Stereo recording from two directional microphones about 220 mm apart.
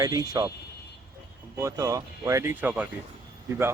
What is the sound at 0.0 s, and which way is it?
Speech, 15° right (ahead or behind).